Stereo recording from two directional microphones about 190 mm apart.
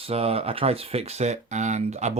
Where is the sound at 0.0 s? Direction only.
30° right (ahead or behind).